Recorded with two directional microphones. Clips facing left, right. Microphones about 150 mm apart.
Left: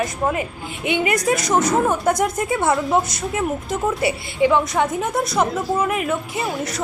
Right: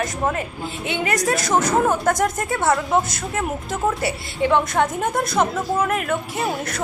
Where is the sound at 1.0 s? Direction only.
45° right (ahead or behind).